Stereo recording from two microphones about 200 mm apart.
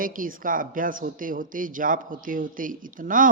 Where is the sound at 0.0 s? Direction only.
45° right (ahead or behind).